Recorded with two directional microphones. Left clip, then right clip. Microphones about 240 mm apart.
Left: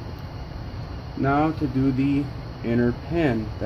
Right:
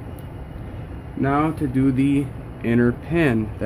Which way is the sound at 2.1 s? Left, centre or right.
Right.